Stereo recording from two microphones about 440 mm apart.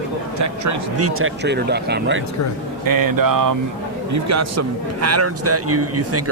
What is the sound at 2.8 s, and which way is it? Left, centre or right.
A man's voice, right.